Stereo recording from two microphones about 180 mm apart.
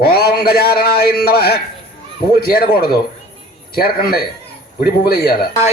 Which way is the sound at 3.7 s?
55° left (ahead or behind).